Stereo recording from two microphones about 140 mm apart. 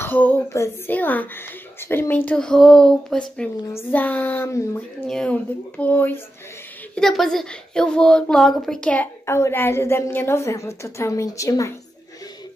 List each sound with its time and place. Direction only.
0.0 s a woman's voice: 15° left (ahead or behind)
3.6 s a woman's voice: 15° left (ahead or behind)
5.0 s a woman's voice: 5° left (ahead or behind)
7.0 s a woman's voice: centre (ahead or behind); by 11.7 s 25° left (ahead or behind)